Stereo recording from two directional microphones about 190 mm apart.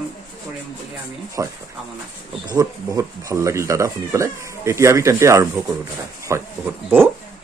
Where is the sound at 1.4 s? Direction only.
15° right (ahead or behind).